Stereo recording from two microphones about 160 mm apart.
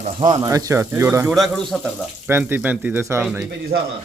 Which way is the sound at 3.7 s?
80° right.